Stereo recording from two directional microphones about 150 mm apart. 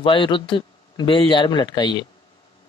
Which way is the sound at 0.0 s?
35° left (ahead or behind).